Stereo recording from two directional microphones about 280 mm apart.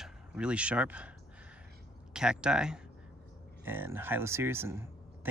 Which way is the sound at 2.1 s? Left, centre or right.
Centre.